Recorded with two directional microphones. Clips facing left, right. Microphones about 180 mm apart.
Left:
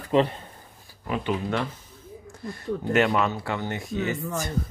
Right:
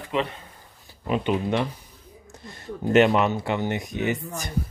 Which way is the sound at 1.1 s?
20° right (ahead or behind).